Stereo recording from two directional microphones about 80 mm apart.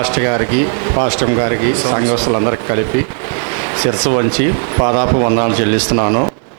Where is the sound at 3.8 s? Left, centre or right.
Right.